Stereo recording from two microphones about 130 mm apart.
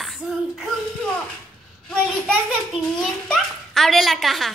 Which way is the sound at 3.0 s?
Centre (ahead or behind).